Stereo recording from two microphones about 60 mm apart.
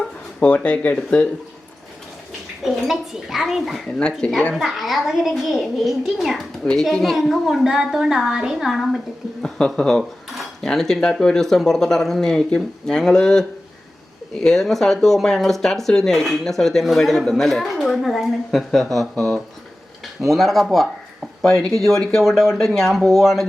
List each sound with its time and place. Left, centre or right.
0.3 s speech: centre
2.6 s a woman's voice: centre
9.4 s a woman's voice: centre